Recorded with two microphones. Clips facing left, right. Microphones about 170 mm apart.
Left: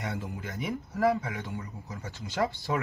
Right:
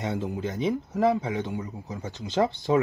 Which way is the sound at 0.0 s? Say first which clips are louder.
Right 7 dB; 20° right (ahead or behind).